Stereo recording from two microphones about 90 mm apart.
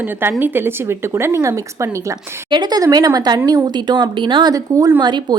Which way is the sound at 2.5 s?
50° right (ahead or behind).